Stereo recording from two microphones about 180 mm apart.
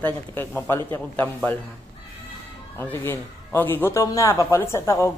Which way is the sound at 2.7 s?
10° left (ahead or behind).